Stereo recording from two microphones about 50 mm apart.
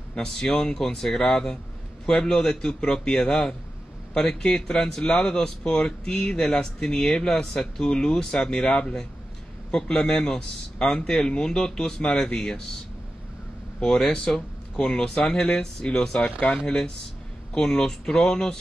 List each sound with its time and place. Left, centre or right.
0.1 s a man's voice: centre
13.7 s a man's voice: centre
17.6 s a man's voice: centre